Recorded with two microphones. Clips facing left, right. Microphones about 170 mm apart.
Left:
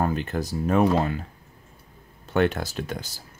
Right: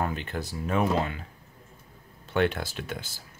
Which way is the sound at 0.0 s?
40° left (ahead or behind).